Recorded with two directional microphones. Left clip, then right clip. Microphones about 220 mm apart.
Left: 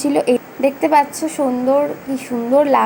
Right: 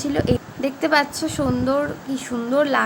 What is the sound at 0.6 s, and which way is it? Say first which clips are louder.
Speech: left 7 dB; 5° left (ahead or behind).